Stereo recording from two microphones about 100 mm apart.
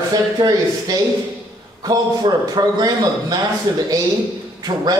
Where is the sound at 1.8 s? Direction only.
40° right (ahead or behind).